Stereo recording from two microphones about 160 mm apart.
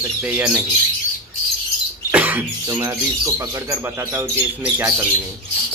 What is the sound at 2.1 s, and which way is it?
Cough, 10° right (ahead or behind).